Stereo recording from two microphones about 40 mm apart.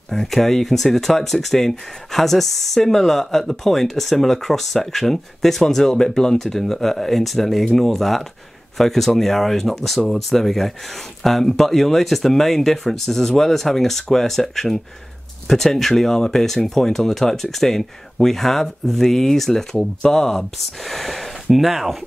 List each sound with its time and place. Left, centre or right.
0.1 s speech: centre
20.0 s speech: centre
20.3 s speech: centre